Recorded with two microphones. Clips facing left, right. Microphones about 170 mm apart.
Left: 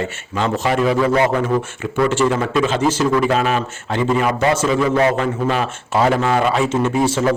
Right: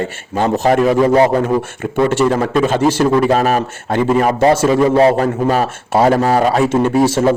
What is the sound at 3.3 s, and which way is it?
A man's voice, 40° right (ahead or behind).